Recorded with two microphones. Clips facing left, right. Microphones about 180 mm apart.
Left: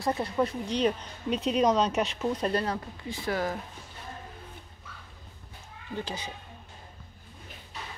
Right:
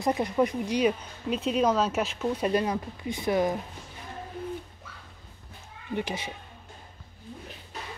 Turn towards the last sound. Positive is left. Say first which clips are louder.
# right 4 dB
turn(degrees=-20)  # may be behind; listen again after turning